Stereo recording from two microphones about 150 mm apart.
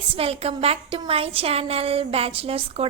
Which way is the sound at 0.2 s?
40° right (ahead or behind).